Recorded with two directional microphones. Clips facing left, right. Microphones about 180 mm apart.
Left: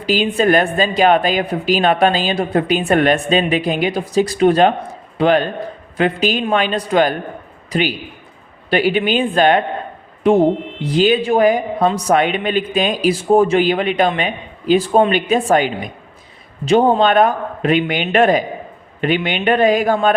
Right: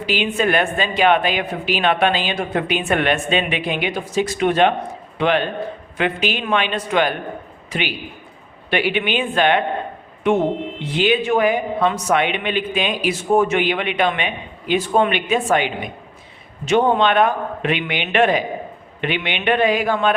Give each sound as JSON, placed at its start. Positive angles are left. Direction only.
{"t": 0.0, "sound": "speech", "side_deg": 40}